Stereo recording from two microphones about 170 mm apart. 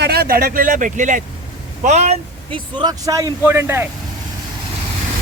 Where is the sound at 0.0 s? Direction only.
65° right (ahead or behind); by 3.8 s 15° right (ahead or behind).